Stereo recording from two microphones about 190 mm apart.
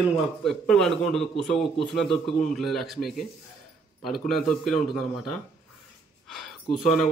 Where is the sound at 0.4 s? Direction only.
Centre (ahead or behind).